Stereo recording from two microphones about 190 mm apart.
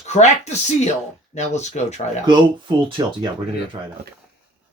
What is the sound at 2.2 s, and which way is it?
Speech, 25° right (ahead or behind).